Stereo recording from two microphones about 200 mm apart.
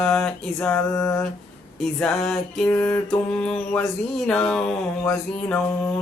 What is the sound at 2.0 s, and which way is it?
Mantra, centre (ahead or behind).